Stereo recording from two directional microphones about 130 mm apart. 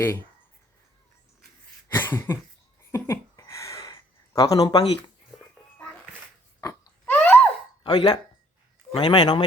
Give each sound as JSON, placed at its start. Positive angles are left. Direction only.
{"t": 1.9, "sound": "cough", "side_deg": 15}
{"t": 2.9, "sound": "a sound", "side_deg": 20}
{"t": 4.4, "sound": "speech", "side_deg": 30}
{"t": 5.3, "sound": "music", "side_deg": 0}
{"t": 7.0, "sound": "a sound", "side_deg": 10}
{"t": 7.9, "sound": "speech", "side_deg": 35}